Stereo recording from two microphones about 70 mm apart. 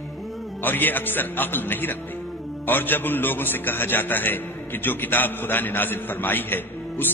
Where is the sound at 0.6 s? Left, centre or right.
Left.